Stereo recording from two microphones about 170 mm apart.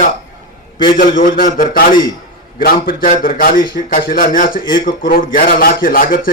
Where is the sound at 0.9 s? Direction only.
55° left (ahead or behind).